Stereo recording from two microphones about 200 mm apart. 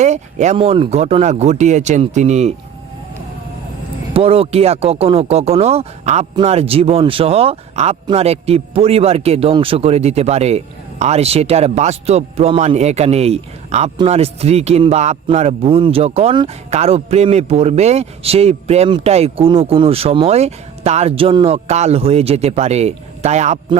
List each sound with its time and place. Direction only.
0.0 s a man's voice: 35° right (ahead or behind)
4.1 s a man's voice: 30° right (ahead or behind)